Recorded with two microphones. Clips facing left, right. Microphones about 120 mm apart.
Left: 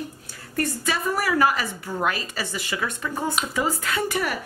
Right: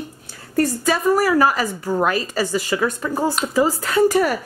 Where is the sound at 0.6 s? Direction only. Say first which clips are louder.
Right 7 dB; 40° right (ahead or behind).